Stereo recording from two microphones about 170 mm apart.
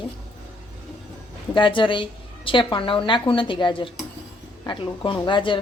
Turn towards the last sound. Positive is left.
turn(degrees=30)  # may be behind; listen again after turning